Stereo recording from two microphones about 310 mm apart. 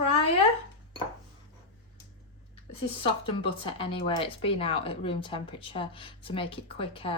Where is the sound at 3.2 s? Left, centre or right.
Centre.